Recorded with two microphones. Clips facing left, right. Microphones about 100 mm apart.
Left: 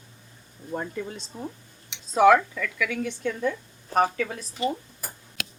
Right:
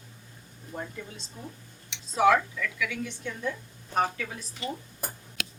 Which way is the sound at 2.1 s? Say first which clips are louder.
Left 5 dB; 55° left (ahead or behind).